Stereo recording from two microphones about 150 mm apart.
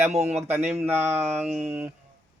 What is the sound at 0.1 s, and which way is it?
Speech, 45° right (ahead or behind).